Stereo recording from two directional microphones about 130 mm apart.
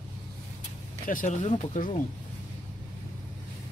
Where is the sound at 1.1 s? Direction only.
90° left.